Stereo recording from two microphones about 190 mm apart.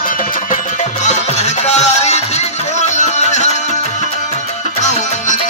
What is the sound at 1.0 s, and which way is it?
Music, 35° left (ahead or behind).